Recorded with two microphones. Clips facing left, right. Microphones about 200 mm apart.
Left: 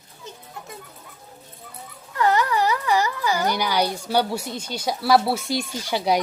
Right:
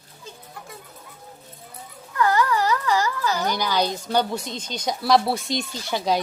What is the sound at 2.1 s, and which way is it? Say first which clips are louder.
A child's voice: even; 20° left (ahead or behind).